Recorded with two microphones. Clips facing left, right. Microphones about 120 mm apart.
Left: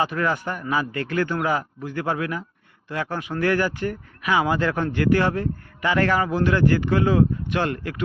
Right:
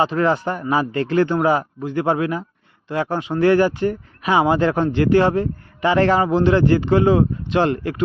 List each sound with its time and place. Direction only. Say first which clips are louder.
0.0 s speech: right 5 dB; 25° right (ahead or behind)